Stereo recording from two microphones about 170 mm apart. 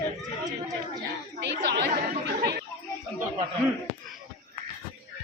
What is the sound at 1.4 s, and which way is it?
Chatter, 90° right.